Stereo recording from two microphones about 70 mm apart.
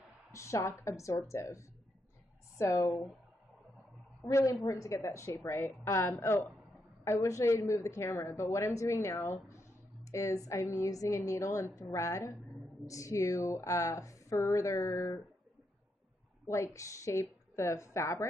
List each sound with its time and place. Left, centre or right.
0.3 s a woman's voice: left
4.2 s a woman's voice: left
16.4 s a woman's voice: left